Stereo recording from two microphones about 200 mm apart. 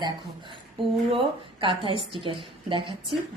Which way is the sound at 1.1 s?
25° right (ahead or behind).